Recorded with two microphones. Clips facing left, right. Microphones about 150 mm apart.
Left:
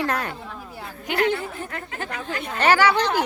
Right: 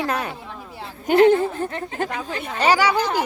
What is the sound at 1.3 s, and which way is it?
Speech, 40° right (ahead or behind).